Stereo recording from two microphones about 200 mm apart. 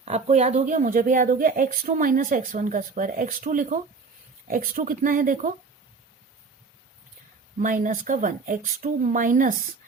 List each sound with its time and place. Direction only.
0.0 s speech: 35° right (ahead or behind)
7.6 s speech: 40° right (ahead or behind)